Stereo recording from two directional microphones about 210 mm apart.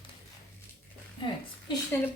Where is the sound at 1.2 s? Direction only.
25° left (ahead or behind).